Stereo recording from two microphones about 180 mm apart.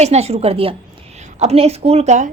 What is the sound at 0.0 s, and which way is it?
A woman's voice, 35° right (ahead or behind).